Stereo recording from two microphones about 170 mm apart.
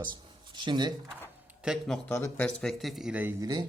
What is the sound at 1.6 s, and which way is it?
Speech, centre (ahead or behind).